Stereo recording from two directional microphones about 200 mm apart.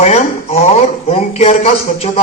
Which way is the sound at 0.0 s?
35° left (ahead or behind).